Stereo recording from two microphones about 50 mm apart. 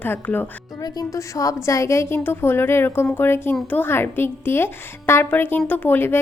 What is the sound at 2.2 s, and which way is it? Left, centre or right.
A woman's voice, left.